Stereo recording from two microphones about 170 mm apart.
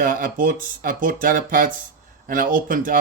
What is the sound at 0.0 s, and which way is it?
Speech, 55° right (ahead or behind).